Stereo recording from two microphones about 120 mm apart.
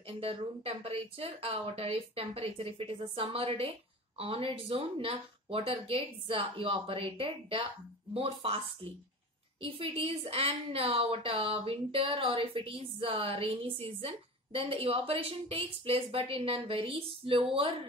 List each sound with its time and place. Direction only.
0.2 s a woman's voice: 55° right (ahead or behind)
9.6 s a woman's voice: 50° right (ahead or behind)